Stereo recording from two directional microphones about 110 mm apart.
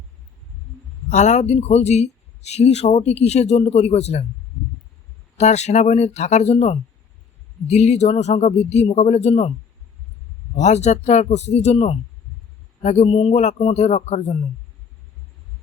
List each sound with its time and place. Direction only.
1.1 s speech: 90° left
2.5 s speech: 80° left
5.4 s speech: 90° left
7.7 s speech: 90° left
10.5 s speech: 90° left